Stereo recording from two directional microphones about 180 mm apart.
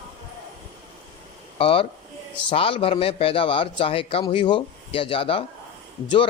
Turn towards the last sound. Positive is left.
turn(degrees=25)  # may be behind; listen again after turning